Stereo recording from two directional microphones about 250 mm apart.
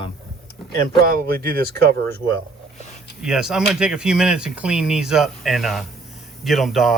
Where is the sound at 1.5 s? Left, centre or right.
Right.